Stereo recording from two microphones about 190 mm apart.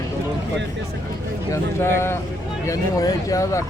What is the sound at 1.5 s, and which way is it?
Speech, 15° left (ahead or behind).